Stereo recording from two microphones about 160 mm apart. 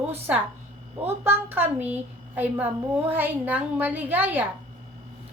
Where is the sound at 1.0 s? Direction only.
15° right (ahead or behind).